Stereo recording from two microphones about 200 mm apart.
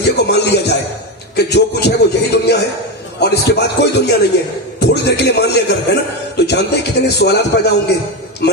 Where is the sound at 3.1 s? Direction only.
55° left (ahead or behind).